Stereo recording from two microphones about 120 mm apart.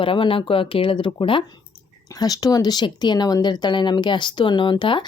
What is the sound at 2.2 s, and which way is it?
Speech, 30° left (ahead or behind).